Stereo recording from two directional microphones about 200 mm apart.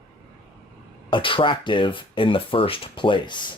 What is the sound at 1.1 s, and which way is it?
Speech, 25° left (ahead or behind).